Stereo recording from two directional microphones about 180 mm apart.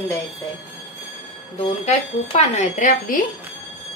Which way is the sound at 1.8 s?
40° left (ahead or behind).